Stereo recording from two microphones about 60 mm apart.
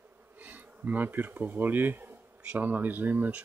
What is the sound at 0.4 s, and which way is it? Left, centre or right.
Speech, right.